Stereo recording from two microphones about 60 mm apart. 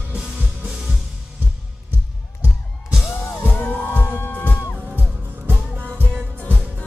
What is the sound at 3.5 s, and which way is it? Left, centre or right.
Music, left.